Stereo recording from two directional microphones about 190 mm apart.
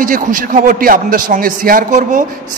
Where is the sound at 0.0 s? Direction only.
45° right (ahead or behind).